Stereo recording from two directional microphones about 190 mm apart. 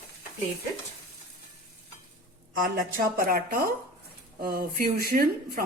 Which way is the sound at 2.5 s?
50° right (ahead or behind).